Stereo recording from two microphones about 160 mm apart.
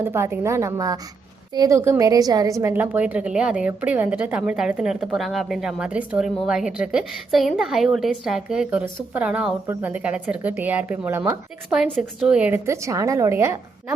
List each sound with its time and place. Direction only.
0.0 s a woman's voice: 15° right (ahead or behind)